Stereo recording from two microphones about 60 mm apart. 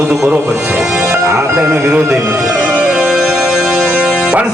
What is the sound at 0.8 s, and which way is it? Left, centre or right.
Speech, centre.